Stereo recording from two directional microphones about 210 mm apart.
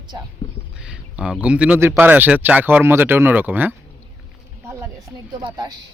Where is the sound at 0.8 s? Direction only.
5° right (ahead or behind).